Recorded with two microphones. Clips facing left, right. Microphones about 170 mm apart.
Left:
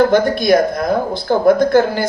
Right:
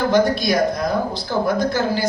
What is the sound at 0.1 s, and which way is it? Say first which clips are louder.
A woman's voice: left 4 dB; 55° left (ahead or behind).